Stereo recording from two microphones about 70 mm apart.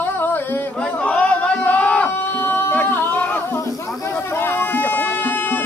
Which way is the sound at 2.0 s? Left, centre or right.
Left.